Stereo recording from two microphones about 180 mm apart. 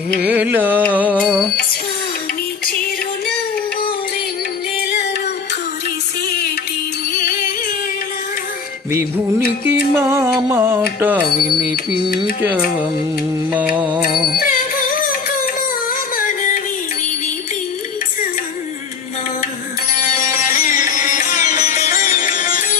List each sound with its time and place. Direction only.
0.2 s music: 10° right (ahead or behind)
9.6 s music: 15° right (ahead or behind)
12.4 s music: 10° right (ahead or behind)
14.3 s music: 55° left (ahead or behind)
15.9 s a sound: 50° left (ahead or behind)
20.1 s music: 50° left (ahead or behind)